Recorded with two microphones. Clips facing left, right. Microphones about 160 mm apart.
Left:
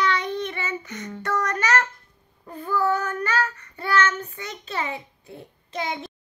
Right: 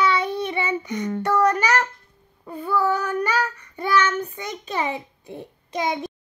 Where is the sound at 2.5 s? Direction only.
10° right (ahead or behind).